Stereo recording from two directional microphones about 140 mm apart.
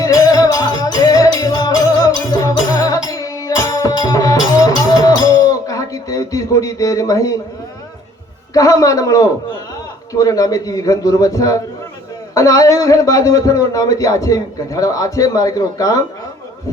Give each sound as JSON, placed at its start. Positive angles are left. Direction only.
{"t": 0.0, "sound": "music", "side_deg": 25}
{"t": 8.5, "sound": "a man's voice", "side_deg": 25}